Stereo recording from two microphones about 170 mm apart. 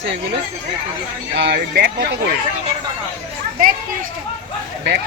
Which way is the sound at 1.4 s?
80° right.